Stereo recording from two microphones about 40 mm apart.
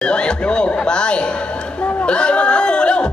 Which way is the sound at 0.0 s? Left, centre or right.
Left.